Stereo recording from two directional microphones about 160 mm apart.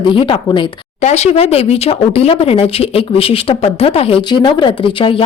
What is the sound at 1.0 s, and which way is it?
Speech, 45° left (ahead or behind).